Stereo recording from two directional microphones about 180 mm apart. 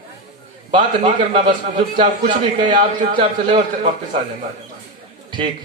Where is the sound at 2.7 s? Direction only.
30° right (ahead or behind).